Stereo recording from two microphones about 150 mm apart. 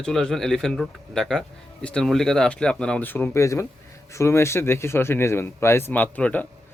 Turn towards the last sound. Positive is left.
turn(degrees=10)  # may be behind; listen again after turning